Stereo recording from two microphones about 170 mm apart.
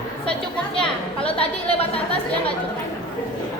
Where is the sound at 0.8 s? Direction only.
5° left (ahead or behind).